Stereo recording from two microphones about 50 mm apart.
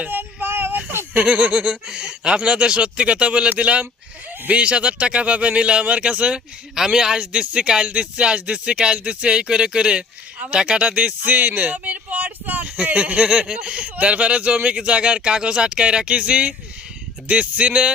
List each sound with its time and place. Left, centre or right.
0.1 s child singing: right
0.9 s a sound: right
1.2 s speech: right
10.8 s speech: right